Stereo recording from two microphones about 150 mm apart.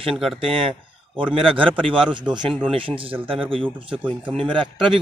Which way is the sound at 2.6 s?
35° right (ahead or behind).